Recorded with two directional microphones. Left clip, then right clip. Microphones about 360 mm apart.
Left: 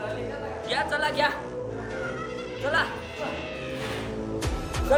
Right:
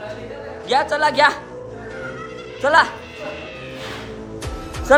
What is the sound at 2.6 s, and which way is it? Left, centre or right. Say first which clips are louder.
Speech: right 11 dB; centre.